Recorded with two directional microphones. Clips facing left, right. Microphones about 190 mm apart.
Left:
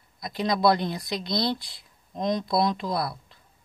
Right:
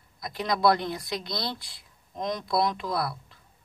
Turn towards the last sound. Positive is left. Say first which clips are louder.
# left 2 dB
turn(degrees=20)  # may be behind; listen again after turning